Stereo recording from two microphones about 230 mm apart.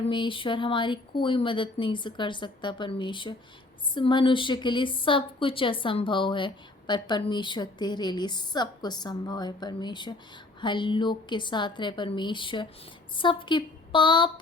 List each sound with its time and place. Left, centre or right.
0.1 s a woman's voice: left